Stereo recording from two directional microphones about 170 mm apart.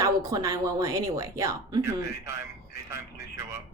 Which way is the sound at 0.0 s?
20° right (ahead or behind).